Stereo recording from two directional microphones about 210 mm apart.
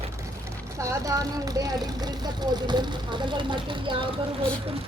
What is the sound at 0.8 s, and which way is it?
Speech, 15° right (ahead or behind).